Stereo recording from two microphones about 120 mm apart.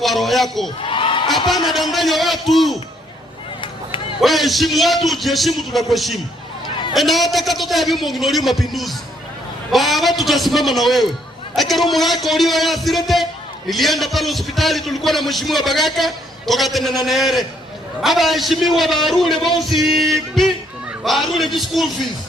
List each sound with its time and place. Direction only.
0.0 s a man's voice: centre (ahead or behind)
0.8 s a sound: 45° left (ahead or behind)
1.6 s a man's voice: centre (ahead or behind)
4.2 s a man's voice: centre (ahead or behind)